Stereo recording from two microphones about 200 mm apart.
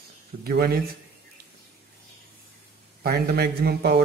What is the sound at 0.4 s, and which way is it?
Speech, 50° right (ahead or behind).